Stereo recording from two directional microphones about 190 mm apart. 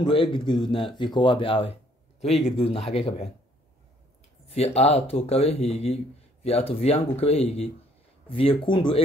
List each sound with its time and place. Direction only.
0.0 s speech: 25° left (ahead or behind)
4.5 s speech: 35° left (ahead or behind)